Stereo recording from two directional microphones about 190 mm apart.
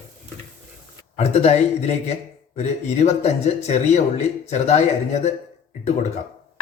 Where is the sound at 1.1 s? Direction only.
35° left (ahead or behind).